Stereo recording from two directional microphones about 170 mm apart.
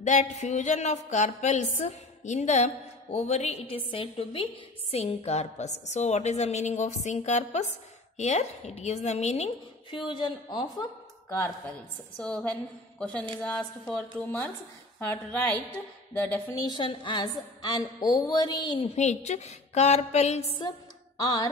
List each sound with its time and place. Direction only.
0.0 s a woman's voice: 45° left (ahead or behind); by 10.6 s 30° left (ahead or behind)
11.2 s speech: 15° left (ahead or behind)
12.2 s a woman's voice: 5° left (ahead or behind)
16.6 s a woman's voice: 25° left (ahead or behind)
18.9 s a woman's voice: 40° left (ahead or behind)
21.2 s a woman's voice: 25° left (ahead or behind)